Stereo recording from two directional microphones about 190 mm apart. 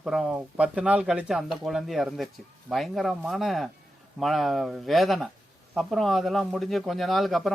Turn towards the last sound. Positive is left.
turn(degrees=0)  # may be behind; listen again after turning